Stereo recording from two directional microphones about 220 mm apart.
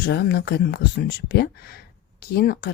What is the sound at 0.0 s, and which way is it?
Speech, 45° left (ahead or behind).